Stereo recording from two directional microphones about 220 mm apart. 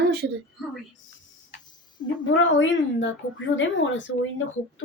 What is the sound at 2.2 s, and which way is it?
A woman's voice, 60° left (ahead or behind).